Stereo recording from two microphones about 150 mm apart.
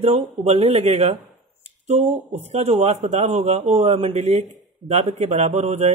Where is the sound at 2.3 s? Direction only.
45° right (ahead or behind).